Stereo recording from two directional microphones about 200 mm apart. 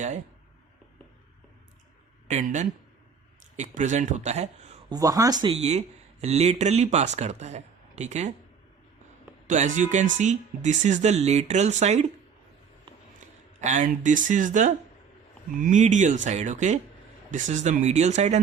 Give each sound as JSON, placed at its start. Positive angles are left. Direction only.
{"t": 2.3, "sound": "speech", "side_deg": -35}
{"t": 4.9, "sound": "speech", "side_deg": -15}
{"t": 5.5, "sound": "speech", "side_deg": -30}
{"t": 9.5, "sound": "speech", "side_deg": -40}
{"t": 13.1, "sound": "speech", "side_deg": -40}